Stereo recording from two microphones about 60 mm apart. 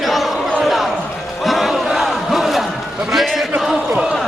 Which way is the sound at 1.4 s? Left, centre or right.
Centre.